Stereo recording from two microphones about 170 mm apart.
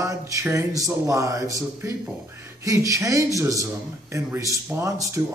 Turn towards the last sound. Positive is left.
turn(degrees=-15)  # may be behind; listen again after turning